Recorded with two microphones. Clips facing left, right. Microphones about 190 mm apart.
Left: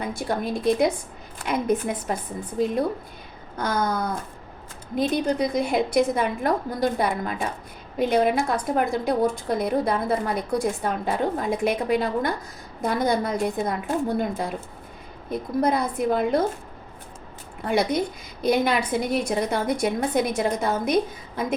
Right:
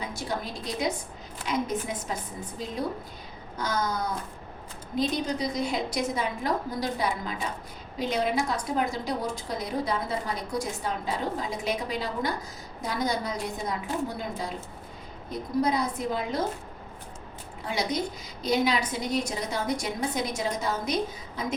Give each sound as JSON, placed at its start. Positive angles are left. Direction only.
{"t": 0.0, "sound": "a woman's voice", "side_deg": 55}
{"t": 17.6, "sound": "a woman's voice", "side_deg": 55}